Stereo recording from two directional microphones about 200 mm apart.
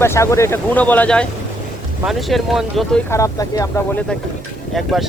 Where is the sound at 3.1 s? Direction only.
15° left (ahead or behind).